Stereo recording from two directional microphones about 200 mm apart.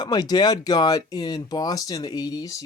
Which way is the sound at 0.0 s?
20° left (ahead or behind).